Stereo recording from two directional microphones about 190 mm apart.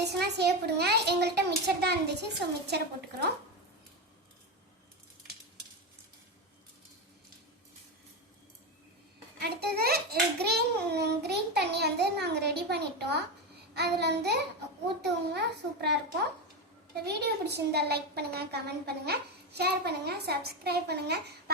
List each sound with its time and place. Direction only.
0.0 s a woman's voice: 60° right (ahead or behind)
9.4 s a woman's voice: 55° right (ahead or behind)
17.1 s a woman's voice: 60° right (ahead or behind)